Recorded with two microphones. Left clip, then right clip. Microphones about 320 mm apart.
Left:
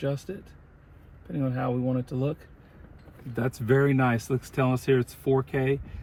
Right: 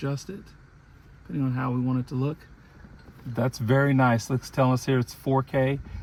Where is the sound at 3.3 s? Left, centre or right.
Centre.